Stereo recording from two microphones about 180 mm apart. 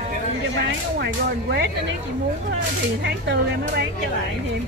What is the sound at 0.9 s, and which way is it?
Speech, 70° right (ahead or behind).